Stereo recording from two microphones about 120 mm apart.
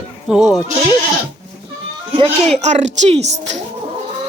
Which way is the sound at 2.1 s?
55° right (ahead or behind).